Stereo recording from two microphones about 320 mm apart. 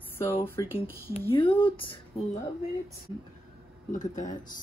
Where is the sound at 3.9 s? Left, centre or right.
Left.